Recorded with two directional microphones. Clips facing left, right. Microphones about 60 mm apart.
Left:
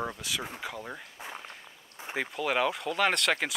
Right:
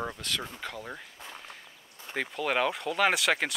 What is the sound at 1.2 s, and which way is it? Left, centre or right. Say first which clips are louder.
Speech: left 3 dB; centre.